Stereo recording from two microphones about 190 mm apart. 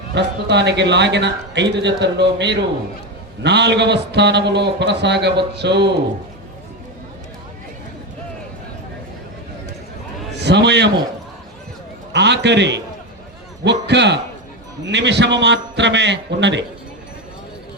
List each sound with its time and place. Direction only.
0.1 s speech: 65° right (ahead or behind)
10.3 s a sound: 65° right (ahead or behind)
12.1 s a man's voice: 65° right (ahead or behind)